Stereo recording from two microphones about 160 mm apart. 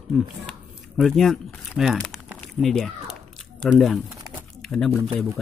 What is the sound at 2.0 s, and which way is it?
Crumpling, centre (ahead or behind).